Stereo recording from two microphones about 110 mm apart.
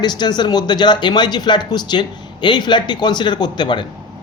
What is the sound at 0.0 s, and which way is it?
Speech, 40° left (ahead or behind).